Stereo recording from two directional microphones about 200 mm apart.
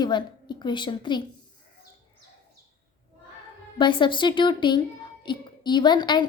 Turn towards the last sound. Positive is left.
turn(degrees=20)  # may be behind; listen again after turning